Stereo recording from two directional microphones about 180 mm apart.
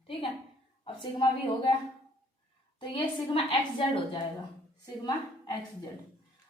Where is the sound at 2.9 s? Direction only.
30° left (ahead or behind).